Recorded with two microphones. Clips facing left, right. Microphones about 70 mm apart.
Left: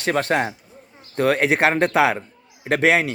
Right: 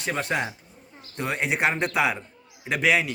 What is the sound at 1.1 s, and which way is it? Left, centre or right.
A man's voice, left.